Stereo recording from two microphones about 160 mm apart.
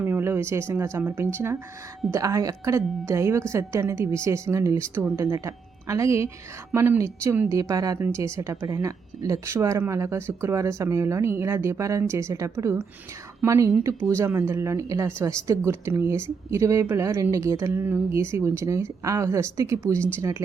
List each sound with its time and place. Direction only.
0.0 s a woman's voice: 15° right (ahead or behind)